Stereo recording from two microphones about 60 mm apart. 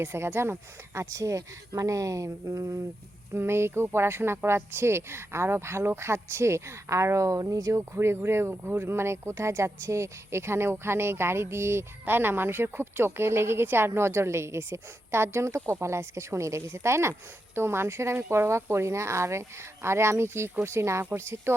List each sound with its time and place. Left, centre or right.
0.0 s speech: right
1.1 s speech: right
3.3 s speech: right
7.8 s speech: right